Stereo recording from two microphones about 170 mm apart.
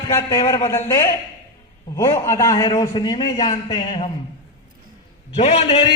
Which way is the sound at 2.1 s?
15° left (ahead or behind).